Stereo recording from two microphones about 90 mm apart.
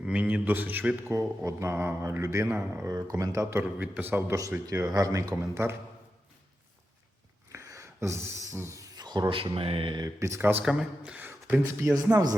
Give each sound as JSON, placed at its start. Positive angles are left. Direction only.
{"t": 0.0, "sound": "a man's voice", "side_deg": -15}
{"t": 2.8, "sound": "speech", "side_deg": -40}
{"t": 3.5, "sound": "a man's voice", "side_deg": -15}
{"t": 4.6, "sound": "speech", "side_deg": -40}
{"t": 7.5, "sound": "a sound", "side_deg": -35}
{"t": 8.5, "sound": "speech", "side_deg": -30}
{"t": 10.2, "sound": "speech", "side_deg": -30}
{"t": 10.6, "sound": "speech", "side_deg": -5}
{"t": 11.3, "sound": "a sound", "side_deg": -20}
{"t": 11.6, "sound": "a man's voice", "side_deg": -25}